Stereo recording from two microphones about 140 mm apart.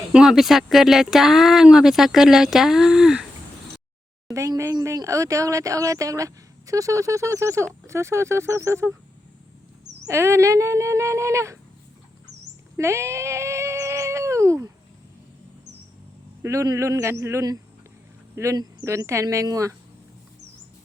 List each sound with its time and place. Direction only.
0.1 s speech: 5° right (ahead or behind)
4.3 s speech: 20° right (ahead or behind)
10.1 s speech: 20° right (ahead or behind)
12.7 s cat: 20° right (ahead or behind)
16.4 s speech: 20° right (ahead or behind)